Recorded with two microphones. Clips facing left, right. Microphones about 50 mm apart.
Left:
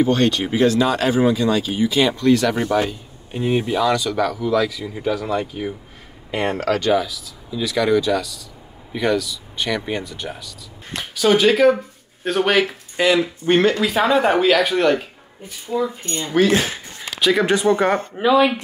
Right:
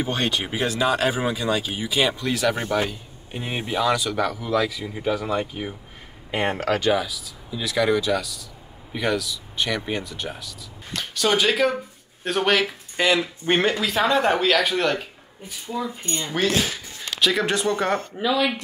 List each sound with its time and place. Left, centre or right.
0.0 s speech: centre
13.5 s speech: centre
13.7 s speech: centre
16.5 s speech: left
17.2 s speech: centre
18.1 s speech: left